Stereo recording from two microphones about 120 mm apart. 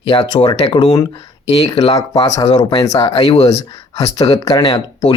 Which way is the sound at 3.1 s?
50° left (ahead or behind).